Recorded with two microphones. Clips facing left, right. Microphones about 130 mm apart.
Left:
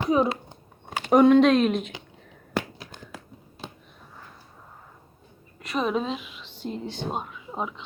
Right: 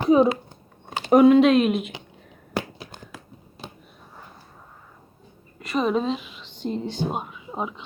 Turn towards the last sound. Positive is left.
turn(degrees=-5)  # may be behind; listen again after turning